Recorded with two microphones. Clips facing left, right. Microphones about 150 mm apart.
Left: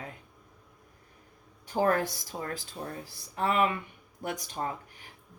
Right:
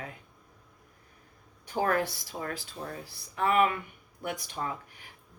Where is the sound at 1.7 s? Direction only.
40° left (ahead or behind).